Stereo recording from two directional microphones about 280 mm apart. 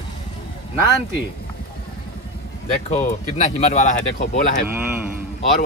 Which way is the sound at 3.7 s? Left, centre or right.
Left.